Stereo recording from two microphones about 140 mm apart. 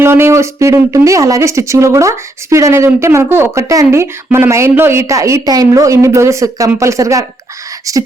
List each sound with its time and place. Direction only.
0.0 s speech: 15° right (ahead or behind)